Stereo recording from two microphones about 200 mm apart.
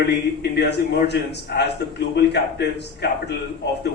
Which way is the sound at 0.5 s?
55° left (ahead or behind).